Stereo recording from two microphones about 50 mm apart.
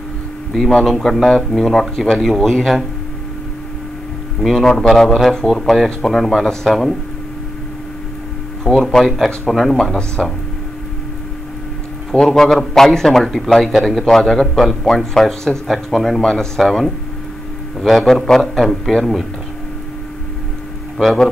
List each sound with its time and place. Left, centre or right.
0.5 s speech: centre
4.4 s speech: centre
8.6 s a man's voice: centre
9.9 s a man's voice: centre
12.4 s a man's voice: centre
21.0 s speech: centre